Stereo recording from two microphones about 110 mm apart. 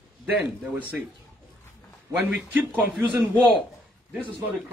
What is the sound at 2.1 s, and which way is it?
Speech, 15° right (ahead or behind).